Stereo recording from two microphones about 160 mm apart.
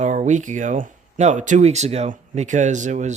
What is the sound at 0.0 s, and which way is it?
Speech, 45° right (ahead or behind).